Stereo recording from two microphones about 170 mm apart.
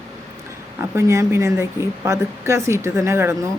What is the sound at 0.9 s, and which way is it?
Speech, 15° right (ahead or behind).